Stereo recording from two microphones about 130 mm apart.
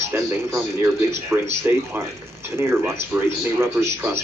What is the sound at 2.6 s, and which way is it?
Speech, 20° right (ahead or behind).